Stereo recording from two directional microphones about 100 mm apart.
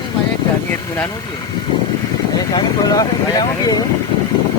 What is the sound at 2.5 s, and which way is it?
Speech, 40° left (ahead or behind).